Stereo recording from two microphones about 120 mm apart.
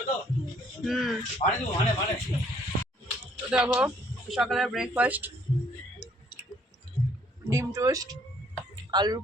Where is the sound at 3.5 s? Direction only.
10° right (ahead or behind).